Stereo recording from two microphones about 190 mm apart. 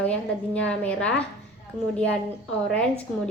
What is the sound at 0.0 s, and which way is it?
A woman's voice, 5° left (ahead or behind).